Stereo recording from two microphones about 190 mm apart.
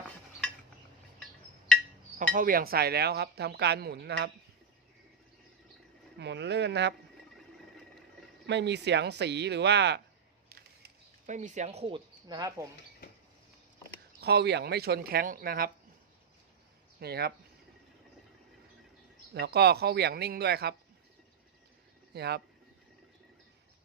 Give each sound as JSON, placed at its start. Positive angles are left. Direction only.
{"t": 2.1, "sound": "speech", "side_deg": -45}
{"t": 6.1, "sound": "speech", "side_deg": -65}
{"t": 8.4, "sound": "speech", "side_deg": -65}
{"t": 10.5, "sound": "a sound", "side_deg": -55}
{"t": 11.3, "sound": "speech", "side_deg": -40}
{"t": 14.2, "sound": "speech", "side_deg": -60}
{"t": 17.0, "sound": "speech", "side_deg": -55}
{"t": 19.3, "sound": "speech", "side_deg": -60}
{"t": 22.1, "sound": "speech", "side_deg": -60}